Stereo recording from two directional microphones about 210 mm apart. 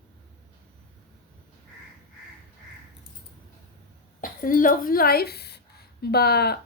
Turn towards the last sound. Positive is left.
turn(degrees=50)  # may be behind; listen again after turning